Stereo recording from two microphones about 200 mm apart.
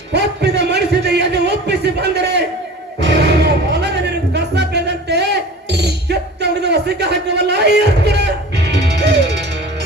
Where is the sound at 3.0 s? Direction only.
55° right (ahead or behind).